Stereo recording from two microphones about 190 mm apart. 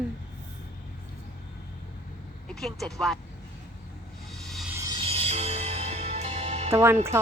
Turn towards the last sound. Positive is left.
turn(degrees=-15)  # may be behind; listen again after turning